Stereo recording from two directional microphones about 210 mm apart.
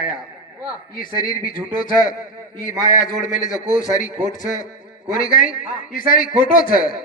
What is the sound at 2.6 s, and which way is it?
A man's voice, 40° left (ahead or behind).